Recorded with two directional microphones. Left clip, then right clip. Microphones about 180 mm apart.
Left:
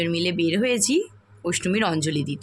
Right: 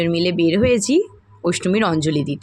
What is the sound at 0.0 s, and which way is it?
Speech, 20° right (ahead or behind).